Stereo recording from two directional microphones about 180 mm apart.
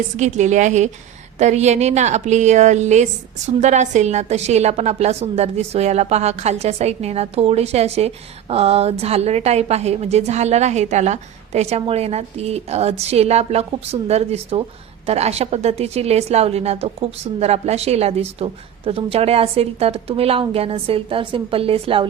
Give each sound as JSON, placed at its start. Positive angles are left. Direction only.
{"t": 0.2, "sound": "a woman's voice", "side_deg": -40}